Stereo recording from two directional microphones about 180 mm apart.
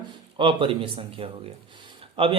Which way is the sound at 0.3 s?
30° right (ahead or behind).